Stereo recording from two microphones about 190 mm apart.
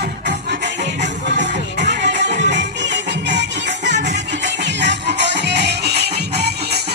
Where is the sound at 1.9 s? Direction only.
65° right (ahead or behind).